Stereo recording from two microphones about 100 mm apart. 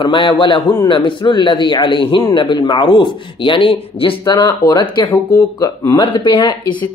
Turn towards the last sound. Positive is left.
turn(degrees=55)  # may be behind; listen again after turning